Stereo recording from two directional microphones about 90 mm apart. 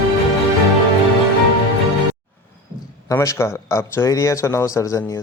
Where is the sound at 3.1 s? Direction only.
35° left (ahead or behind).